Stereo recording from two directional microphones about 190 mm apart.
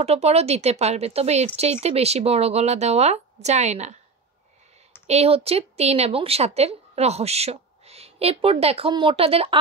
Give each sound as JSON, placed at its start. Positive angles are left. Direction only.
{"t": 0.0, "sound": "speech", "side_deg": -30}
{"t": 5.0, "sound": "speech", "side_deg": -35}